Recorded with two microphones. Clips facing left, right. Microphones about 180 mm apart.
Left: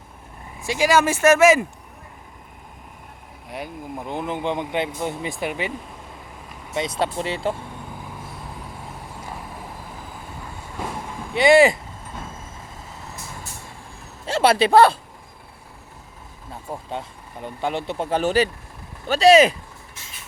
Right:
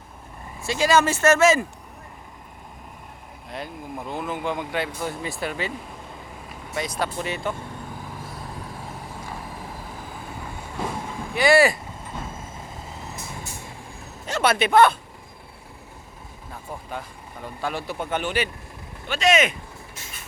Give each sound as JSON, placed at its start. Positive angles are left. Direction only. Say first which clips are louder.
{"t": 0.6, "sound": "speech", "louder": "left 1 dB", "side_deg": 10}
{"t": 3.5, "sound": "speech", "louder": "left 2 dB", "side_deg": 15}
{"t": 6.7, "sound": "speech", "louder": "left 3 dB", "side_deg": 25}
{"t": 11.3, "sound": "speech", "louder": "left 4 dB", "side_deg": 20}
{"t": 14.3, "sound": "a man's voice", "louder": "left 4 dB", "side_deg": 30}
{"t": 16.5, "sound": "a man's voice", "louder": "left 4 dB", "side_deg": 25}